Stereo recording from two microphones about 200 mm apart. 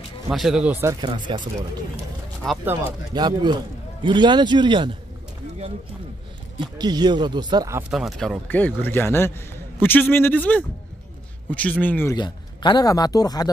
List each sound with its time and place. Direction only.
0.3 s speech: centre (ahead or behind)
1.0 s a man's voice: 20° right (ahead or behind)
2.4 s speech: 5° right (ahead or behind)
3.2 s a man's voice: 20° right (ahead or behind)
6.6 s a man's voice: 20° right (ahead or behind)
7.9 s a man's voice: centre (ahead or behind)
12.2 s a man's voice: 20° left (ahead or behind)